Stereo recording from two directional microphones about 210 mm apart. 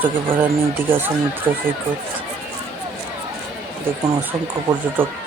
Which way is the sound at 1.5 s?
20° right (ahead or behind).